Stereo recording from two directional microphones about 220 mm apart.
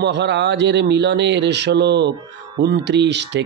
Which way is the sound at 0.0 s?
50° right (ahead or behind).